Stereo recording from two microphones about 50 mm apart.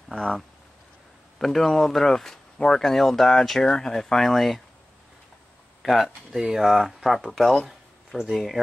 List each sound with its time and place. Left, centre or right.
0.1 s speech: centre
1.4 s speech: centre
5.8 s speech: centre